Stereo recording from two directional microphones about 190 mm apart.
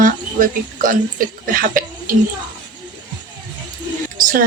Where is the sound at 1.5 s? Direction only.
45° right (ahead or behind).